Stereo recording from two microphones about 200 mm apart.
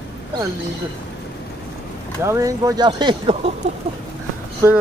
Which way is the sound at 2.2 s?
15° right (ahead or behind).